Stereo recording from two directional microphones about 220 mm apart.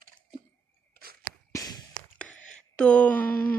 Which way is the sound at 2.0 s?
5° left (ahead or behind).